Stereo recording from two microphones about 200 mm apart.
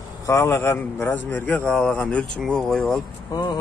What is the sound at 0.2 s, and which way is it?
Speech, 15° left (ahead or behind).